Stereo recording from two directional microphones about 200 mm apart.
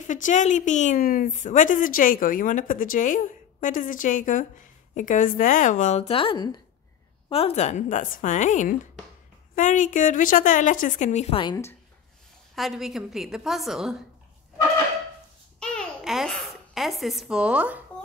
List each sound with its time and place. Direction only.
0.0 s a woman's voice: 40° left (ahead or behind); by 11.7 s 20° left (ahead or behind)
12.5 s a woman's voice: centre (ahead or behind)
15.6 s babbling: 5° left (ahead or behind)